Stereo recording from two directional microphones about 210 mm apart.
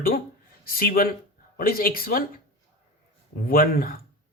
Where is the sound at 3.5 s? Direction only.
45° left (ahead or behind).